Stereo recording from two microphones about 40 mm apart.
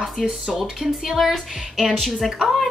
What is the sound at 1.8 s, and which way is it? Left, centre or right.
Speech, centre.